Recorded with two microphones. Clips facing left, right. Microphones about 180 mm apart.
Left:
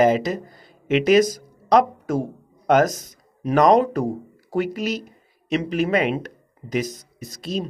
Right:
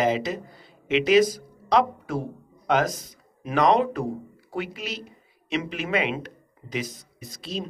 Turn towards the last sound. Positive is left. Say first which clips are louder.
# left 5 dB
turn(degrees=45)  # may be behind; listen again after turning